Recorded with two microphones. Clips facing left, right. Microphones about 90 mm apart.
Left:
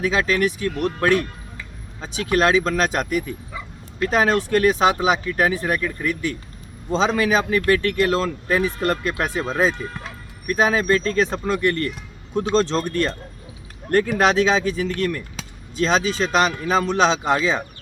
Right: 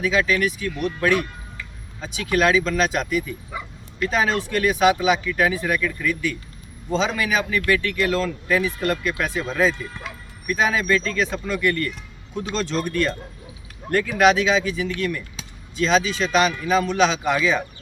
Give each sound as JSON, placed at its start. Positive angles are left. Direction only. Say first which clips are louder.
{"t": 0.0, "sound": "a man's voice", "louder": "left 1 dB", "side_deg": 35}
{"t": 0.7, "sound": "a man's voice", "louder": "left 1 dB", "side_deg": 45}
{"t": 14.2, "sound": "a man's voice", "louder": "right 4 dB", "side_deg": 40}